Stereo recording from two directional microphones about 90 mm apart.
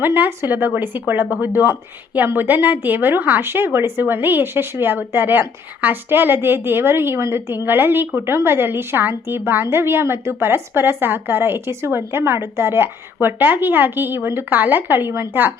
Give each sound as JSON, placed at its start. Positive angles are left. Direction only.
{"t": 0.0, "sound": "speech", "side_deg": -20}